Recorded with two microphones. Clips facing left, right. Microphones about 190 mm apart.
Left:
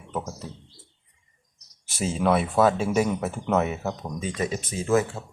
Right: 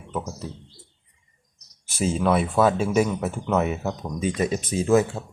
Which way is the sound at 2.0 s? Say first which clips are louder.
Right 1 dB; centre (ahead or behind).